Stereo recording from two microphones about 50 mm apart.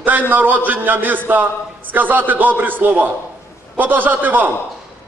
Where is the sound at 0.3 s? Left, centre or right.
Right.